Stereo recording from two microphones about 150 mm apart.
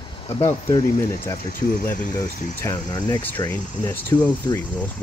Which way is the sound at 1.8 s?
15° left (ahead or behind).